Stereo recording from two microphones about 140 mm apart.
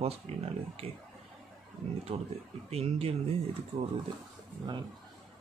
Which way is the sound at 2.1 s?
40° right (ahead or behind).